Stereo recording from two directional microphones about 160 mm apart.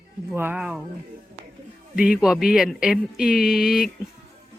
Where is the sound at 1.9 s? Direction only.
5° right (ahead or behind).